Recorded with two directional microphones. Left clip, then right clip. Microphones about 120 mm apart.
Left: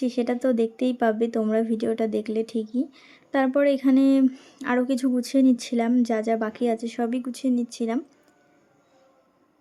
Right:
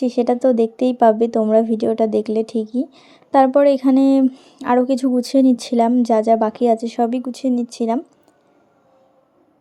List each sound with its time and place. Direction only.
0.0 s a woman's voice: 25° right (ahead or behind)
4.2 s speech: 10° right (ahead or behind)
4.5 s a woman's voice: 25° right (ahead or behind)